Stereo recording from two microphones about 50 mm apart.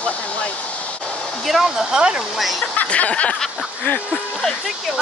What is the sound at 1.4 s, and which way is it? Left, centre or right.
Speech, centre.